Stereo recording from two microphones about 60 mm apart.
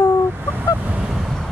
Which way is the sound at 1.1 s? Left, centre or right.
Centre.